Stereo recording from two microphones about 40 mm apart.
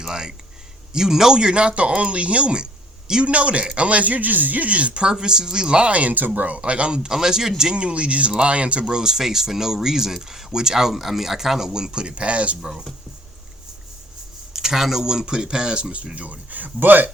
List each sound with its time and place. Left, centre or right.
0.0 s a man's voice: centre; by 5.0 s right
5.0 s speech: centre
5.9 s speech: right
7.1 s speech: centre
7.7 s speech: right
14.5 s speech: centre; by 17.1 s right